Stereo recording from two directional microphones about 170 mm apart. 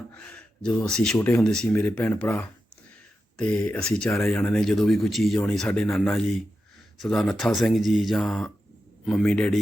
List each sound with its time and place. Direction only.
0.3 s speech: 10° left (ahead or behind)